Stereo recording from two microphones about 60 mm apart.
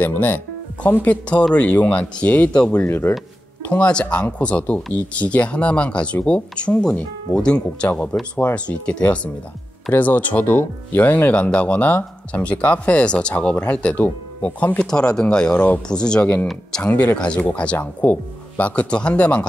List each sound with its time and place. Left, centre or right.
0.0 s speech: left
2.8 s speech: left
3.6 s speech: left
14.8 s speech: centre